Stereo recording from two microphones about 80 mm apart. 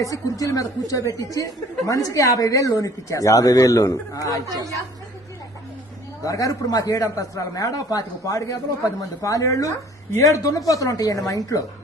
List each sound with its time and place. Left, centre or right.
0.0 s speech: left
4.4 s a woman's voice: right
6.2 s speech: left